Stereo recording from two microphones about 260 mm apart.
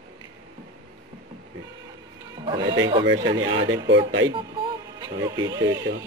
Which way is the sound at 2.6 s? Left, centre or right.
Right.